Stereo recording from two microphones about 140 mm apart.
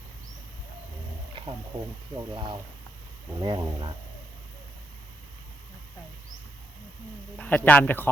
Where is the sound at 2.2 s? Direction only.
30° right (ahead or behind).